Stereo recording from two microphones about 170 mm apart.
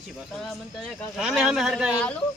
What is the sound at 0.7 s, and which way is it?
Speech, centre (ahead or behind).